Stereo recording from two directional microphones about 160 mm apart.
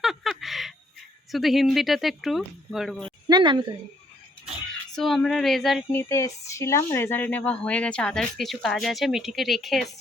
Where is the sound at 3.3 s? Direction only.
30° right (ahead or behind).